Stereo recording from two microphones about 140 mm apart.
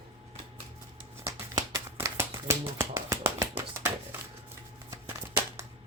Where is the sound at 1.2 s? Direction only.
25° right (ahead or behind).